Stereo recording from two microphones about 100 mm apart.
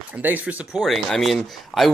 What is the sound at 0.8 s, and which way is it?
Speech, centre (ahead or behind).